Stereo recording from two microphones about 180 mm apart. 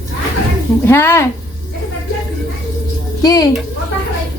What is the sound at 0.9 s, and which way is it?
Speech, 15° left (ahead or behind).